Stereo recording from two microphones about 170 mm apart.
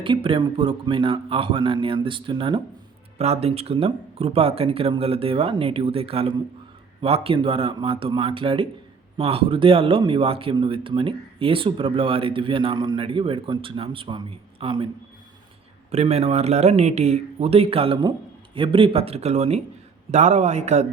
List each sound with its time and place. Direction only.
0.0 s speech: 30° right (ahead or behind)
15.9 s speech: 40° right (ahead or behind)